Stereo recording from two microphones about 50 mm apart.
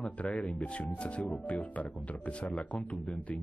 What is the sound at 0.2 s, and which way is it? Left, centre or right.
Speech, left.